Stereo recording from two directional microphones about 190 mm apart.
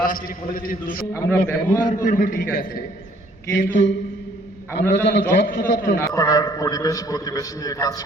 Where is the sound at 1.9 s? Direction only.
45° left (ahead or behind).